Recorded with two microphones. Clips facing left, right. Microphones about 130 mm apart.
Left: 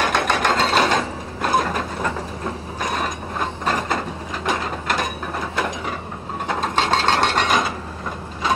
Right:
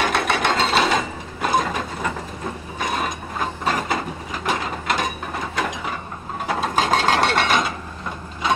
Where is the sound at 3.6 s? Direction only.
5° right (ahead or behind).